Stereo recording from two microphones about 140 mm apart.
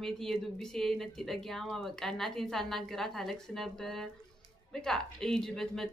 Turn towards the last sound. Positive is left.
turn(degrees=5)  # may be behind; listen again after turning